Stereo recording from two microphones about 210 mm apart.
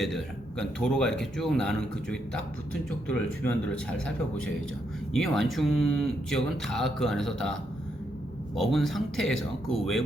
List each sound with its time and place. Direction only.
0.0 s a man's voice: centre (ahead or behind)
5.1 s a man's voice: centre (ahead or behind)
8.5 s a man's voice: centre (ahead or behind)